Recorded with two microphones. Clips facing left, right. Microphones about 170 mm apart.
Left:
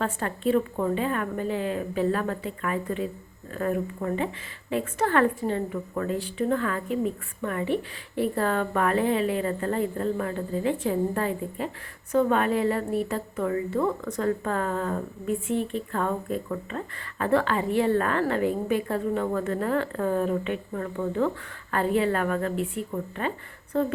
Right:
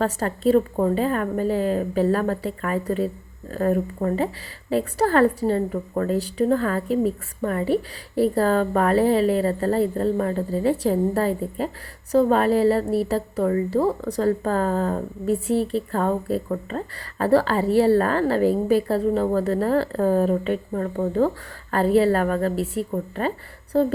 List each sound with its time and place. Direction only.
0.0 s a woman's voice: 40° right (ahead or behind)